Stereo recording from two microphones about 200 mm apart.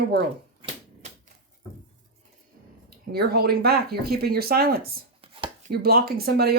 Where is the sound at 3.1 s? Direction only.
50° right (ahead or behind).